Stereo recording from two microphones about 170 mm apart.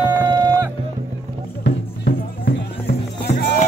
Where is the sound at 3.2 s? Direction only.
75° left (ahead or behind).